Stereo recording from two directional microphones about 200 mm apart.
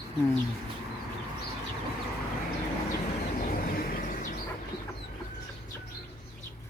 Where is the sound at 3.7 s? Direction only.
45° left (ahead or behind).